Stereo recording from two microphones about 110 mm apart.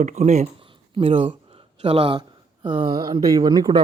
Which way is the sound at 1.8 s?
70° right (ahead or behind).